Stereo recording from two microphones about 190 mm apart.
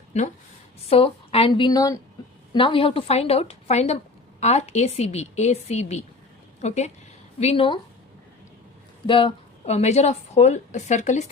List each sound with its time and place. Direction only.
0.1 s a woman's voice: 35° left (ahead or behind)
9.0 s a woman's voice: 30° left (ahead or behind)